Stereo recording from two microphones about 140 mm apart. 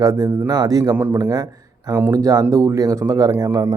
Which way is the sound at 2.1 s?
25° right (ahead or behind).